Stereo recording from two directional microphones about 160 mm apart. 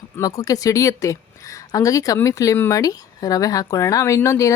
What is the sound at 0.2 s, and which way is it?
A woman's voice, 20° left (ahead or behind).